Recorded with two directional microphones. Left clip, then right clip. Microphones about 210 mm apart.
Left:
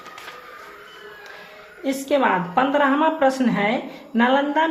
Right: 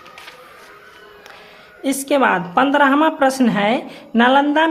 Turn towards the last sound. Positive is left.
turn(degrees=-35)  # may be behind; listen again after turning